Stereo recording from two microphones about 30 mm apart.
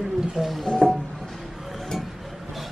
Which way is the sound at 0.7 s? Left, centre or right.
Left.